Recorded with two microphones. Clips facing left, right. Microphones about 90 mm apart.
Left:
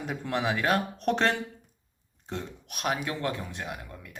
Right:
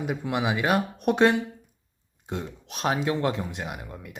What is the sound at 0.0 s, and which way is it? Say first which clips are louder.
Speech: right 3 dB; 10° right (ahead or behind).